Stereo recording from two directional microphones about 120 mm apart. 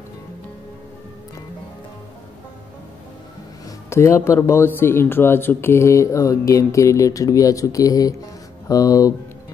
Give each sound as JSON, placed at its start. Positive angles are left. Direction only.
{"t": 3.9, "sound": "speech", "side_deg": 25}